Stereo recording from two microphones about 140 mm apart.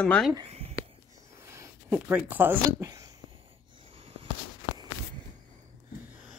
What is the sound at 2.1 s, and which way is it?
Speech, 15° right (ahead or behind).